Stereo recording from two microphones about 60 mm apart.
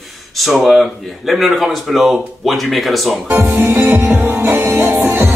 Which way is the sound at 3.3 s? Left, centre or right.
Right.